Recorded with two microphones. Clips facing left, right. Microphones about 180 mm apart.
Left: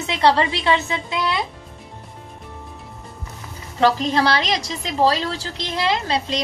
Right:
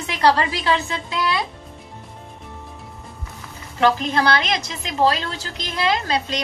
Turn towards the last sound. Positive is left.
turn(degrees=30)  # may be behind; listen again after turning